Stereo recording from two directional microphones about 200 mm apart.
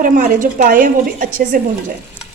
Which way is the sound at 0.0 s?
45° right (ahead or behind).